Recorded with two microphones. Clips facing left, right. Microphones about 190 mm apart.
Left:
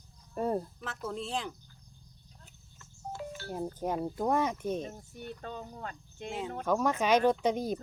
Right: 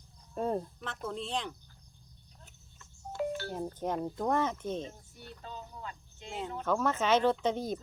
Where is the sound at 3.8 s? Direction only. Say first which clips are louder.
Left 1 dB; 10° left (ahead or behind).